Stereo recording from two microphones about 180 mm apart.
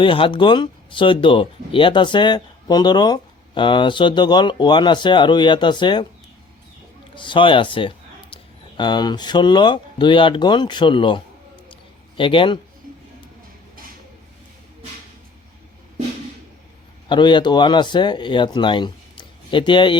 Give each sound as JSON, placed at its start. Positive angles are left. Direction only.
{"t": 0.0, "sound": "speech", "side_deg": 30}
{"t": 7.2, "sound": "a man's voice", "side_deg": 25}
{"t": 17.1, "sound": "speech", "side_deg": 25}